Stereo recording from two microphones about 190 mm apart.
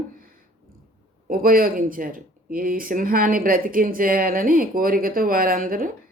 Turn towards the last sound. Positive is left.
turn(degrees=-45)  # may be behind; listen again after turning